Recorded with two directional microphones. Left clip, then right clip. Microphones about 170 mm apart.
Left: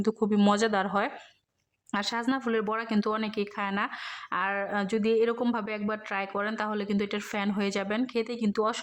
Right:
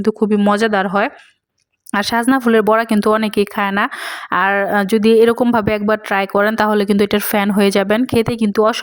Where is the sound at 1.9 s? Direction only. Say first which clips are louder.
Right 14 dB; 45° right (ahead or behind).